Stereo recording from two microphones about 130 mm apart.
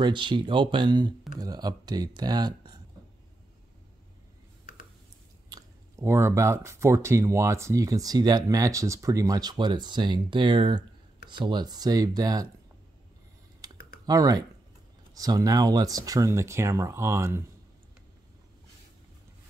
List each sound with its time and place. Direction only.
0.0 s speech: 35° right (ahead or behind)
5.5 s speech: 20° right (ahead or behind)
14.0 s speech: 30° right (ahead or behind)